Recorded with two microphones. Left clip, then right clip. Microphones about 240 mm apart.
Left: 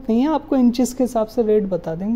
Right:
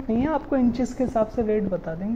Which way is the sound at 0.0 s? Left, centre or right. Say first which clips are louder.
Left 5 dB; left.